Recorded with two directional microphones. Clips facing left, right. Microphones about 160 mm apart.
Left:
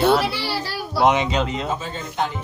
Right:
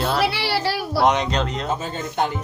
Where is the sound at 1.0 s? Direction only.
5° left (ahead or behind).